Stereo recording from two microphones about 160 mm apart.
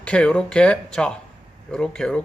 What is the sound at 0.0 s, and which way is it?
Speech, 5° left (ahead or behind).